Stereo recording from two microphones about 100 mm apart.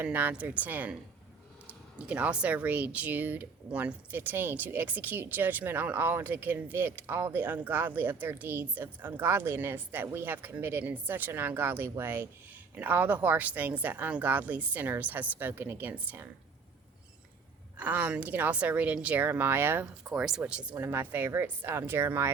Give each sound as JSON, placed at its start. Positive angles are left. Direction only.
{"t": 0.0, "sound": "speech", "side_deg": -15}
{"t": 17.7, "sound": "speech", "side_deg": -15}
{"t": 20.1, "sound": "speech", "side_deg": -5}
{"t": 20.7, "sound": "speech", "side_deg": -20}